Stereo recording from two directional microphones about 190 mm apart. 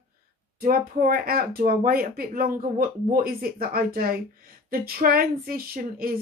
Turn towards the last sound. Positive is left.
turn(degrees=-50)  # may be behind; listen again after turning